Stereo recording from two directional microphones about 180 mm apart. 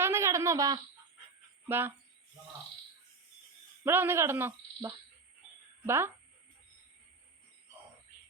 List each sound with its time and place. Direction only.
0.0 s a sound: 15° right (ahead or behind)
1.6 s speech: 10° right (ahead or behind)
3.8 s speech: 15° right (ahead or behind)